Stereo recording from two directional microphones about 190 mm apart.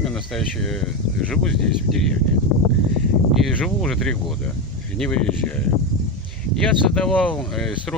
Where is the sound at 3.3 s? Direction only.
Centre (ahead or behind).